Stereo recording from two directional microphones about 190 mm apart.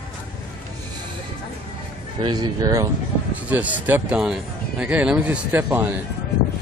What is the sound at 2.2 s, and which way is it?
Speech, 25° right (ahead or behind).